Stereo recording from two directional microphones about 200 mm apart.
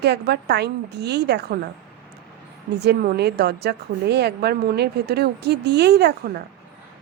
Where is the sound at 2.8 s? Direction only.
55° right (ahead or behind).